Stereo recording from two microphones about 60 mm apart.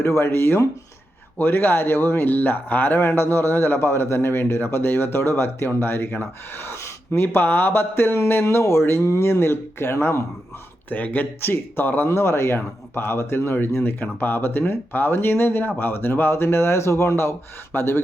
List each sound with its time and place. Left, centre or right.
0.0 s speech: left
10.8 s speech: left
12.0 s speech: left